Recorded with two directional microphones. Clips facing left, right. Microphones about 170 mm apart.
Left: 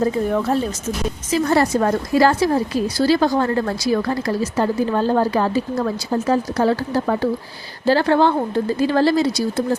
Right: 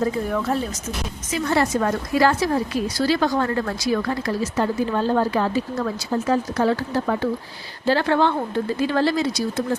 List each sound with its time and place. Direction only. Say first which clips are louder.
0.0 s a woman's voice: left 4 dB; 30° left (ahead or behind)